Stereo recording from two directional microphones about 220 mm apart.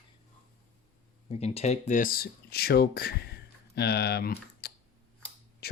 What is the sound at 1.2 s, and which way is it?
Speech, 30° left (ahead or behind).